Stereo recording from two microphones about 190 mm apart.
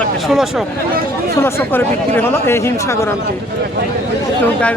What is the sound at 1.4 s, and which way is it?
Speech, 15° left (ahead or behind).